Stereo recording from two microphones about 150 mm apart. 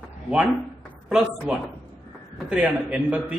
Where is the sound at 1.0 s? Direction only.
5° right (ahead or behind).